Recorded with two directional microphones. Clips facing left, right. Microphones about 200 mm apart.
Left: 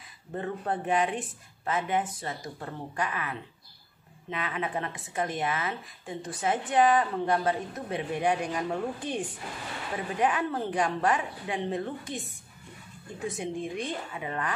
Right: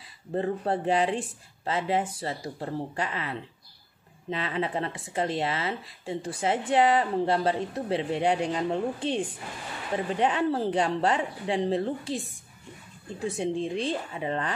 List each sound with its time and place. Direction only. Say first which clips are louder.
0.3 s speech: right 5 dB; 30° right (ahead or behind)
13.4 s speech: right 6 dB; 30° right (ahead or behind)